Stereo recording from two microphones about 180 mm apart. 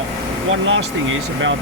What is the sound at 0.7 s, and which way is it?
Speech, 90° right.